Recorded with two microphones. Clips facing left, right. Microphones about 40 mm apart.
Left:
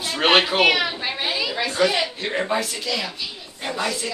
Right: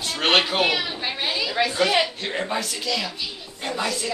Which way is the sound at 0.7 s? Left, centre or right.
Left.